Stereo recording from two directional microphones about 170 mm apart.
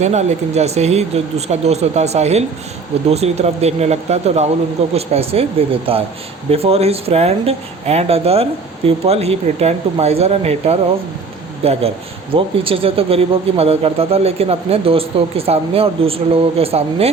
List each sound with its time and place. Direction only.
0.0 s speech: 40° right (ahead or behind)